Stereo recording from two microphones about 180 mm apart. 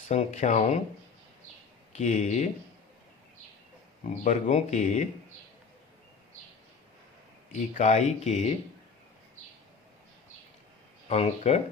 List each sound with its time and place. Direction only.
0.1 s speech: 40° left (ahead or behind)
1.9 s speech: 40° left (ahead or behind)
4.0 s speech: 40° left (ahead or behind)
7.5 s speech: 40° left (ahead or behind)
11.1 s speech: 35° left (ahead or behind)